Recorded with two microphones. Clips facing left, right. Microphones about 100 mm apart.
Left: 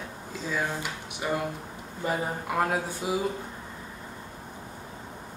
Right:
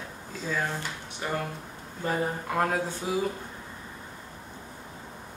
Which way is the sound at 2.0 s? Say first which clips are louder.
Right 1 dB; 10° left (ahead or behind).